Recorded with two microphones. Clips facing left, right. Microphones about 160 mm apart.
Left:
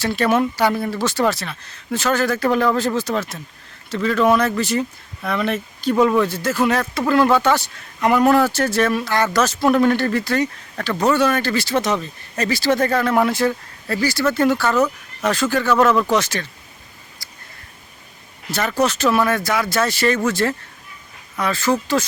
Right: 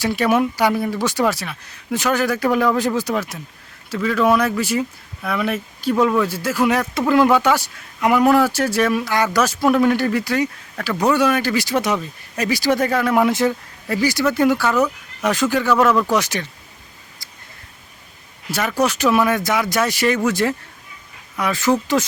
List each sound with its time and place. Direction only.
0.0 s speech: 10° right (ahead or behind)
17.2 s a sound: 20° right (ahead or behind)
18.8 s speech: 15° right (ahead or behind)